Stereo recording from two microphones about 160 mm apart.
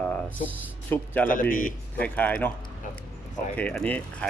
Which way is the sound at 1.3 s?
60° left (ahead or behind).